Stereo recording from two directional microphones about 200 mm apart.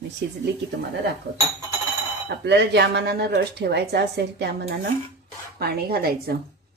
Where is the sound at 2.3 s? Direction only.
60° right (ahead or behind).